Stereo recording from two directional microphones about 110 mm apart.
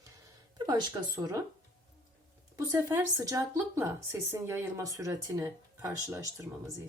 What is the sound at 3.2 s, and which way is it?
Speech, 30° right (ahead or behind).